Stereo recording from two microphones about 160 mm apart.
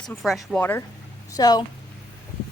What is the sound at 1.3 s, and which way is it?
Speech, 25° left (ahead or behind).